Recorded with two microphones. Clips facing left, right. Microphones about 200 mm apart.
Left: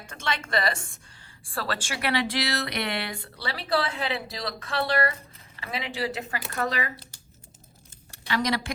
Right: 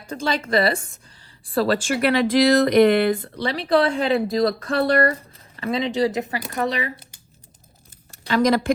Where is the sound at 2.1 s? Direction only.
50° right (ahead or behind).